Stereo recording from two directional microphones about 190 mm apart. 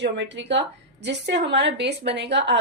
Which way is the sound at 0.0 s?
70° right (ahead or behind).